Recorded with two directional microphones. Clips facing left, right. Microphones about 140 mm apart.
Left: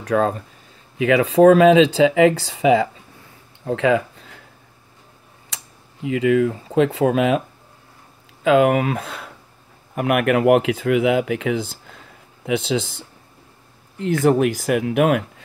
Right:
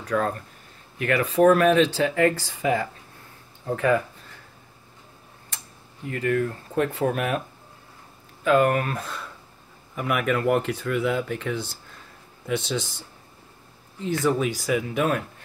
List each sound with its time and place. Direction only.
0.0 s speech: 90° left
3.6 s a sound: 90° left
6.0 s speech: 90° left
8.5 s speech: 90° left
12.4 s speech: 60° left (ahead or behind)
14.2 s speech: 50° left (ahead or behind); by 15.2 s 85° left